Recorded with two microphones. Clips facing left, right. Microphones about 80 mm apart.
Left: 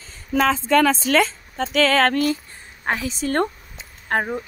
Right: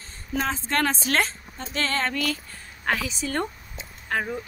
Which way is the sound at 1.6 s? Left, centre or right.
Left.